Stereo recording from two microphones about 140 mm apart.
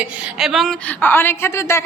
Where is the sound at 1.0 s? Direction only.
15° left (ahead or behind).